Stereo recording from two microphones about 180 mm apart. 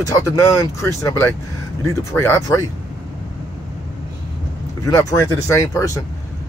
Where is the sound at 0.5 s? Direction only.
15° left (ahead or behind).